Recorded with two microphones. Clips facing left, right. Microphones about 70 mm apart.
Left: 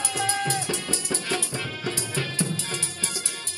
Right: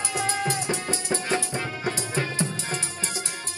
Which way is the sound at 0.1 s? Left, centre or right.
Right.